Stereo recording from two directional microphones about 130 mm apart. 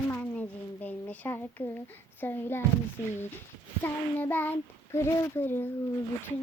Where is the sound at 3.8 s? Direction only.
15° left (ahead or behind).